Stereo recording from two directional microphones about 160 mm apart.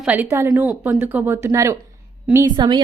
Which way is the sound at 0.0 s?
10° right (ahead or behind).